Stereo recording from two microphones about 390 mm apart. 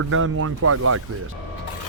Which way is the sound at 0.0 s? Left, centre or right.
Right.